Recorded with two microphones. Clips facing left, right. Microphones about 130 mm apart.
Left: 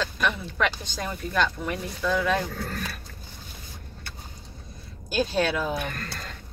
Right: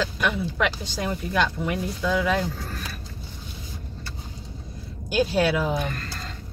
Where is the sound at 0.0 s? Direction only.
5° right (ahead or behind).